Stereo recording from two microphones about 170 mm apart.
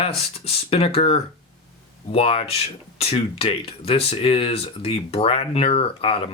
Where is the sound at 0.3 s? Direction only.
35° left (ahead or behind).